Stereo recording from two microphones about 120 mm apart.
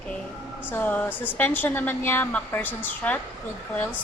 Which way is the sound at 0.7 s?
15° left (ahead or behind).